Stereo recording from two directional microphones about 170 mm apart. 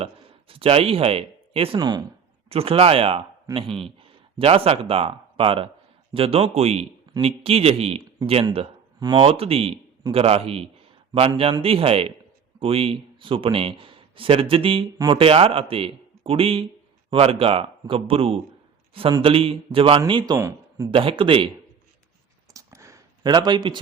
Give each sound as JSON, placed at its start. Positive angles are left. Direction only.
{"t": 0.0, "sound": "speech", "side_deg": -35}
{"t": 2.5, "sound": "a man's voice", "side_deg": -35}
{"t": 20.9, "sound": "a man's voice", "side_deg": -30}
{"t": 22.5, "sound": "a sound", "side_deg": -20}